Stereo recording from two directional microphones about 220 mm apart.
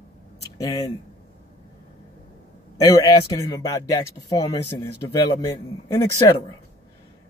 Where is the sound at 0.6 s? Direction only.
15° left (ahead or behind).